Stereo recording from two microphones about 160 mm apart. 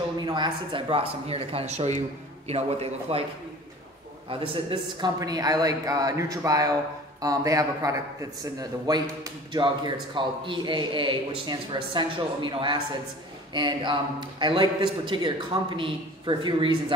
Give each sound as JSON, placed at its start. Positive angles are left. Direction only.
{"t": 0.2, "sound": "speech", "side_deg": -30}
{"t": 4.3, "sound": "speech", "side_deg": -35}